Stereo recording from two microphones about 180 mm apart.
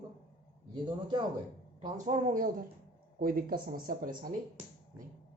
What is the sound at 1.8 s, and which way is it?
Speech, 40° right (ahead or behind).